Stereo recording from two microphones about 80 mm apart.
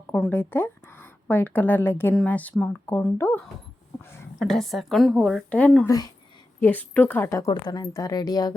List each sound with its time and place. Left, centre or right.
0.3 s a woman's voice: left
4.0 s a sound: left
4.4 s a woman's voice: centre
5.5 s speech: centre
5.8 s speech: left
6.6 s a woman's voice: left
7.2 s a woman's voice: left
7.7 s speech: left